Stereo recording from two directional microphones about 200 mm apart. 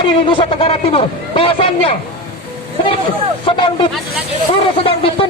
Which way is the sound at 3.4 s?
25° left (ahead or behind).